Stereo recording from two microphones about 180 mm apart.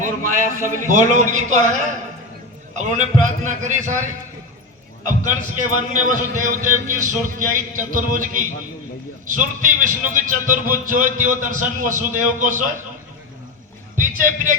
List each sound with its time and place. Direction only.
0.0 s a man's voice: 45° right (ahead or behind)
5.0 s a man's voice: 45° right (ahead or behind)
13.9 s a sound: 45° right (ahead or behind)